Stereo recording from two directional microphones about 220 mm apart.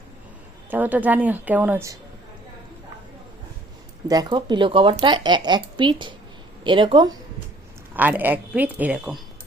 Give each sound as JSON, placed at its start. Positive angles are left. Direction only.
{"t": 0.7, "sound": "a woman's voice", "side_deg": -5}
{"t": 4.1, "sound": "speech", "side_deg": -20}
{"t": 7.9, "sound": "a woman's voice", "side_deg": -10}